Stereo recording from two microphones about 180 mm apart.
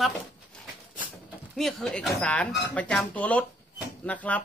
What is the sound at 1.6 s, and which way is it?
Speech, centre (ahead or behind).